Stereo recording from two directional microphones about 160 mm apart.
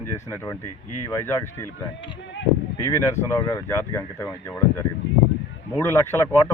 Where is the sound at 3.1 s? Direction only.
15° left (ahead or behind).